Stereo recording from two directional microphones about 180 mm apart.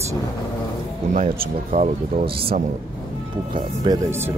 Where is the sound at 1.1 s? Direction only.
40° right (ahead or behind).